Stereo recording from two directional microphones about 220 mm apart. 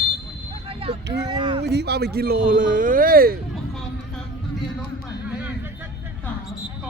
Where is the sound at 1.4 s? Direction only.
20° right (ahead or behind).